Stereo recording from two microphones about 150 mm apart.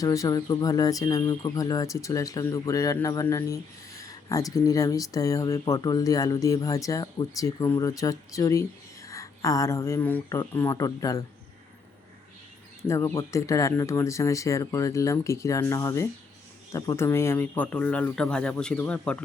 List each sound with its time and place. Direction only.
0.0 s speech: 20° left (ahead or behind)
12.9 s speech: 20° left (ahead or behind)